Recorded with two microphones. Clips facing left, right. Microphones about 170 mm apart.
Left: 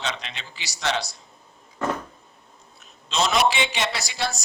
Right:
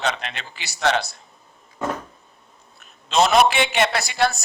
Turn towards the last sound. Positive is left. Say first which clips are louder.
# right 7 dB
turn(degrees=-55)  # may be behind; listen again after turning